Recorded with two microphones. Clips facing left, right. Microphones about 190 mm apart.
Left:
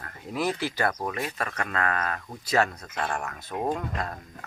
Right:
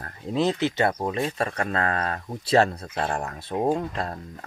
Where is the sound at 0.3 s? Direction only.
25° right (ahead or behind).